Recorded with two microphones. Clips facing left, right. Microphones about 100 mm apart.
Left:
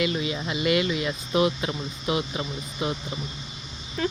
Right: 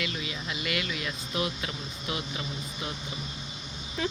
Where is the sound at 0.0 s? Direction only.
25° left (ahead or behind).